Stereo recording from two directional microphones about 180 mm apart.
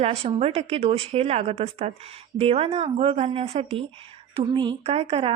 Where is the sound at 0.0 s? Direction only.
35° right (ahead or behind).